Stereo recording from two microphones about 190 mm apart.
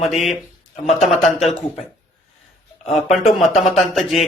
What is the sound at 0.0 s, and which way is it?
Speech, 35° left (ahead or behind).